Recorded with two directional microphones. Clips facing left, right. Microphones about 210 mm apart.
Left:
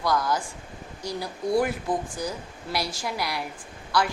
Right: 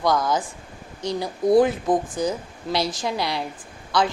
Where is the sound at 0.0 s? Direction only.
20° right (ahead or behind).